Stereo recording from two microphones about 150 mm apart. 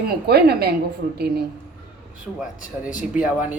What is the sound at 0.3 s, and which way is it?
Speech, 90° right.